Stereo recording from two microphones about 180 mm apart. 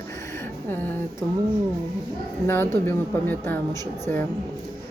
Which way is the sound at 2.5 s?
10° left (ahead or behind).